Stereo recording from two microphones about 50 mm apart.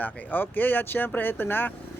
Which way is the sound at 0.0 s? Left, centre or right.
Left.